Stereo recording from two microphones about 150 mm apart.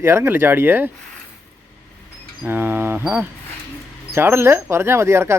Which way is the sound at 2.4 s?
15° right (ahead or behind).